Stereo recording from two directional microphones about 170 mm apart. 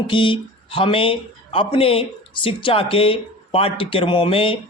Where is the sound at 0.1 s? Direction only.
30° left (ahead or behind).